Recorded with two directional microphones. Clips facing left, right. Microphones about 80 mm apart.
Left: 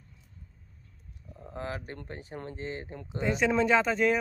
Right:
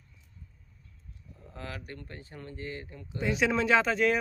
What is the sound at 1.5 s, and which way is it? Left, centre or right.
Speech, left.